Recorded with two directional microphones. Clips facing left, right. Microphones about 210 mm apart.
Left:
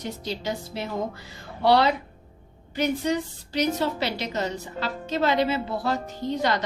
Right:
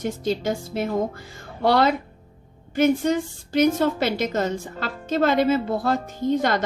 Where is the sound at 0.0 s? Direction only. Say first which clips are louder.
Right 7 dB; 50° right (ahead or behind).